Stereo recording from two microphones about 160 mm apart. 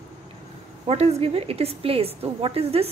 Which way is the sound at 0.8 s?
40° right (ahead or behind).